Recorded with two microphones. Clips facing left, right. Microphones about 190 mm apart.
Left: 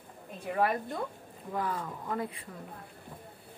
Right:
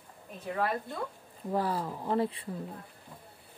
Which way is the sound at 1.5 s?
35° right (ahead or behind).